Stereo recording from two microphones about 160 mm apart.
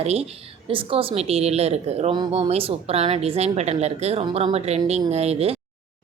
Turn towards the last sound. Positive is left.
turn(degrees=-40)  # may be behind; listen again after turning